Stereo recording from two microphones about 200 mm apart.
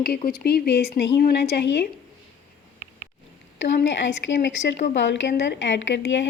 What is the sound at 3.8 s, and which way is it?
Speech, 65° left (ahead or behind).